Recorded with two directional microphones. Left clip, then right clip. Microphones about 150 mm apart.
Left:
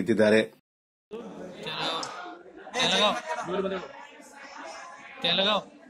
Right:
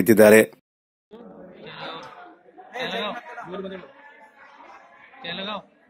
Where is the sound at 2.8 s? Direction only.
15° left (ahead or behind).